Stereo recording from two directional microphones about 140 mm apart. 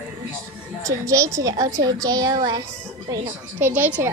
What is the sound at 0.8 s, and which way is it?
A woman's voice, 20° right (ahead or behind).